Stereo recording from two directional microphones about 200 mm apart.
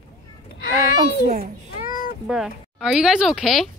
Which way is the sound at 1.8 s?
45° left (ahead or behind).